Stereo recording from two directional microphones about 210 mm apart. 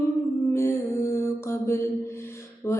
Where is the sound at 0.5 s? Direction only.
15° left (ahead or behind).